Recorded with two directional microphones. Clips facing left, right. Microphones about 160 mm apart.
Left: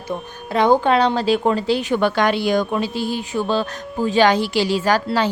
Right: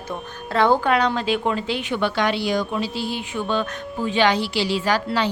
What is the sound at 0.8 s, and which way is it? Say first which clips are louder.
A woman's voice: left 4 dB; 30° left (ahead or behind).